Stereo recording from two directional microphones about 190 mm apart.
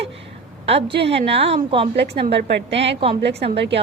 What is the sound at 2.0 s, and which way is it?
A woman's voice, 60° right (ahead or behind).